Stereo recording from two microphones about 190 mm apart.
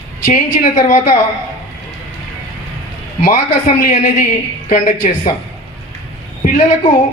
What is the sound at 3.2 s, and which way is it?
A man's voice, 40° left (ahead or behind).